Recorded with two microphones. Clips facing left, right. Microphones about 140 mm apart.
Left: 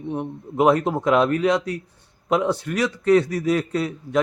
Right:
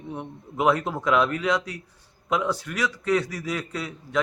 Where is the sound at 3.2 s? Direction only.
55° left (ahead or behind).